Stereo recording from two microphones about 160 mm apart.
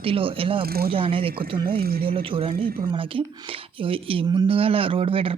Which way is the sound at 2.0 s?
35° right (ahead or behind).